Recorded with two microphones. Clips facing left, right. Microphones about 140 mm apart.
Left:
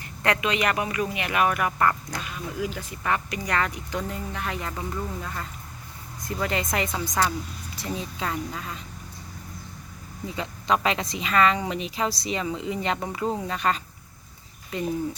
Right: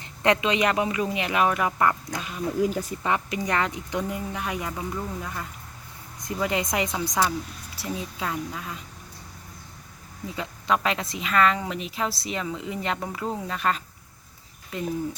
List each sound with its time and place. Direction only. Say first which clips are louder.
0.0 s speech: right 3 dB; 20° right (ahead or behind)
2.6 s speech: right 6 dB; 40° right (ahead or behind)
3.0 s speech: left 2 dB; 20° right (ahead or behind); by 8.8 s 5° right (ahead or behind)
10.3 s speech: left 1 dB; 5° right (ahead or behind)